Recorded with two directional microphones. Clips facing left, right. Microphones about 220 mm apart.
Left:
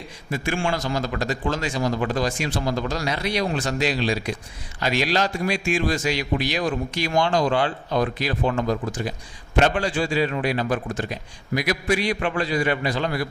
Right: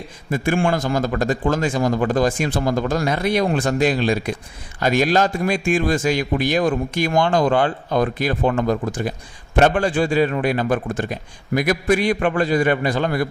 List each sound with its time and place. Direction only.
0.3 s a man's voice: 50° right (ahead or behind)